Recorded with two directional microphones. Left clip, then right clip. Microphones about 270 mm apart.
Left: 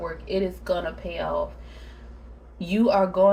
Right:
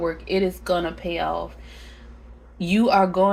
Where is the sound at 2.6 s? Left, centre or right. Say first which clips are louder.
Right 3 dB; right.